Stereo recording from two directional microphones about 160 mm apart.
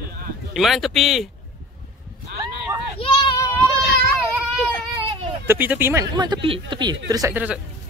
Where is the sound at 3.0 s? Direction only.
35° left (ahead or behind).